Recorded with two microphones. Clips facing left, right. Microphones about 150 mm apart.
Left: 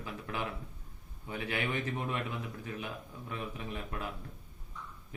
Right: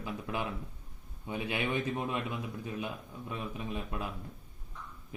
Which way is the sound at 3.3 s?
15° right (ahead or behind).